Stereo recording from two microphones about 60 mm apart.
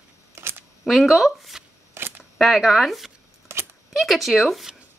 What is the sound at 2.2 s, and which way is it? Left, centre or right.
Speech, centre.